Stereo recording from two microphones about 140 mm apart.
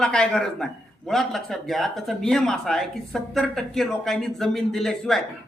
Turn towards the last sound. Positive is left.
turn(degrees=0)  # may be behind; listen again after turning